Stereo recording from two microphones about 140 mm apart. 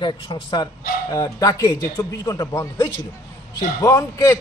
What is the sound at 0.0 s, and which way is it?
A man's voice, 35° left (ahead or behind).